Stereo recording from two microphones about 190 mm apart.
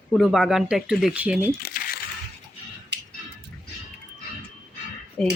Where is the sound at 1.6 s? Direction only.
55° left (ahead or behind).